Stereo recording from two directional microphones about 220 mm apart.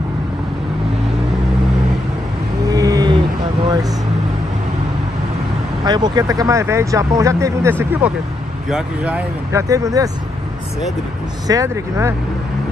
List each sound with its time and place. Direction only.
2.7 s vehicle: 15° right (ahead or behind)
5.9 s speech: 20° right (ahead or behind)
11.4 s speech: 15° right (ahead or behind)